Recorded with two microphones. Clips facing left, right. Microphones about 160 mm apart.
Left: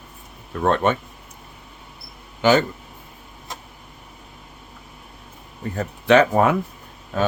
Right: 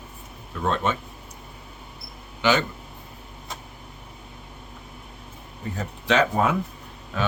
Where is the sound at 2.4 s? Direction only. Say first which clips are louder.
Left 5 dB; 45° left (ahead or behind).